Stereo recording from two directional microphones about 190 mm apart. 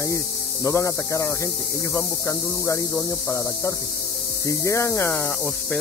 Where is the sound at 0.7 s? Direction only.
15° left (ahead or behind).